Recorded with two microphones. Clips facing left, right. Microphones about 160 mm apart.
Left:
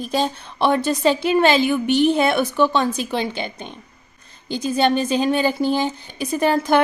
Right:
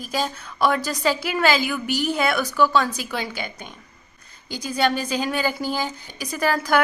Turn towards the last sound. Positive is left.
turn(degrees=25)  # may be behind; listen again after turning